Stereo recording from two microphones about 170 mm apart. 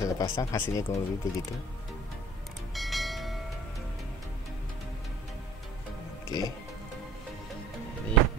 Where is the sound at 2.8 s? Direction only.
Centre (ahead or behind).